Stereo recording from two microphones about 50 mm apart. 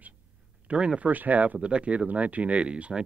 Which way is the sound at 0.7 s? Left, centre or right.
Right.